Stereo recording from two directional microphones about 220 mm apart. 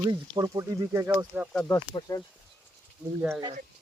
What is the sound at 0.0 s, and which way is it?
Speech, 20° right (ahead or behind).